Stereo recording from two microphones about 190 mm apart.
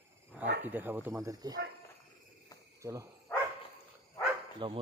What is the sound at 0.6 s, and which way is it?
Speech, 10° right (ahead or behind).